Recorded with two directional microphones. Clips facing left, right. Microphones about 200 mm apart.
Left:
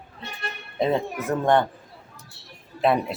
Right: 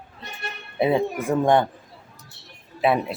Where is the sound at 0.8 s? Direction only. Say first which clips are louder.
Right 3 dB; 10° right (ahead or behind).